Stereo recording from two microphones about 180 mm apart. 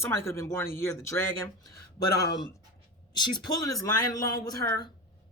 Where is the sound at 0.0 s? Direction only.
15° left (ahead or behind).